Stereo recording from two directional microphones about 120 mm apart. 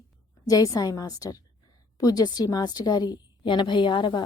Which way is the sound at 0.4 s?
30° left (ahead or behind).